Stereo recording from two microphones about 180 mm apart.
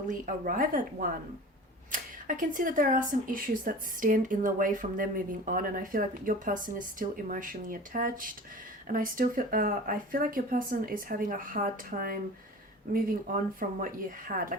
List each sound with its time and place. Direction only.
0.1 s speech: 45° right (ahead or behind)